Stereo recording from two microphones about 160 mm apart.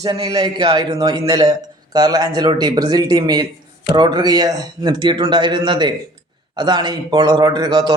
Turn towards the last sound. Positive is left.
turn(degrees=-25)  # may be behind; listen again after turning